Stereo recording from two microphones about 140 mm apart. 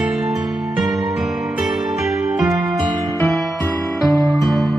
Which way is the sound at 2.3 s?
Centre (ahead or behind).